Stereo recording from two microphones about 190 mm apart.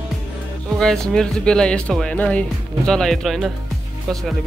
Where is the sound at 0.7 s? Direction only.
5° left (ahead or behind).